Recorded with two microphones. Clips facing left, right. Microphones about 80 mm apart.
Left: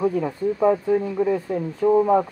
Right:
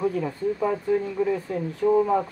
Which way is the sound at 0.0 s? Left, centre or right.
Left.